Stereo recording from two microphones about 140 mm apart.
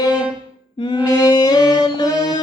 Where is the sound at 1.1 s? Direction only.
25° left (ahead or behind).